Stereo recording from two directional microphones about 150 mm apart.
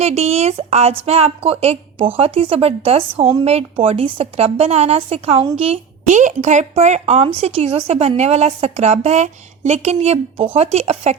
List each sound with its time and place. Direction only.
0.0 s a woman's voice: 45° right (ahead or behind)